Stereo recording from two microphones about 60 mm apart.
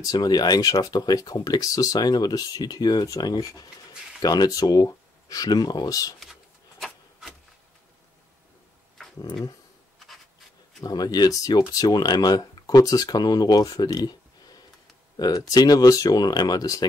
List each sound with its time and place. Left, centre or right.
0.0 s speech: left
10.8 s speech: left